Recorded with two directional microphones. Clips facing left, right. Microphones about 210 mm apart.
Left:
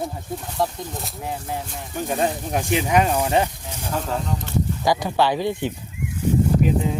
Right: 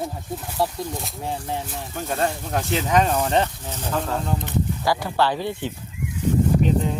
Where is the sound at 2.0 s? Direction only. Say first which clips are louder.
Left 2 dB; 15° left (ahead or behind).